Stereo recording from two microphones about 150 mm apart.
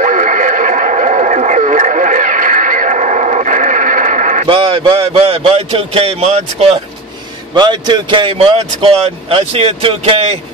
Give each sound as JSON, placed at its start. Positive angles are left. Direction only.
{"t": 0.0, "sound": "radio", "side_deg": -55}
{"t": 4.5, "sound": "speech", "side_deg": -35}
{"t": 7.5, "sound": "speech", "side_deg": -30}